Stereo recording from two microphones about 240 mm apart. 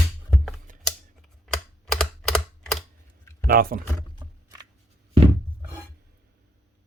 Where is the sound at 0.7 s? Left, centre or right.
Right.